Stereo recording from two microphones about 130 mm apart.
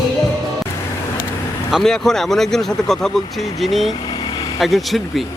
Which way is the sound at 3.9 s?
35° left (ahead or behind).